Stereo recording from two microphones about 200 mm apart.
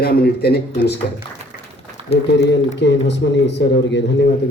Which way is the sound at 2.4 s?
60° left (ahead or behind).